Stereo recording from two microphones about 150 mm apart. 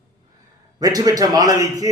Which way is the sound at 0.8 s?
25° right (ahead or behind).